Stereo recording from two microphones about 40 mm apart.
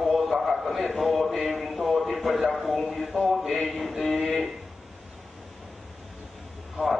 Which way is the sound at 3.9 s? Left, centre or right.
Centre.